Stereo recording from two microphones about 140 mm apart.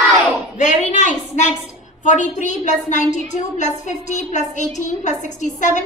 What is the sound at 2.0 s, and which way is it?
A woman's voice, 60° left (ahead or behind).